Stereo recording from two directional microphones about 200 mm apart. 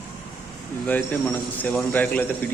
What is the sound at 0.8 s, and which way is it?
A man's voice, 10° left (ahead or behind).